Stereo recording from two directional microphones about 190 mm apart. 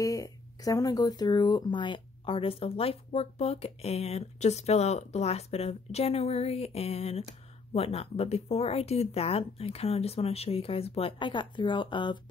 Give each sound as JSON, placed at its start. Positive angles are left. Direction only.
{"t": 0.0, "sound": "speech", "side_deg": 20}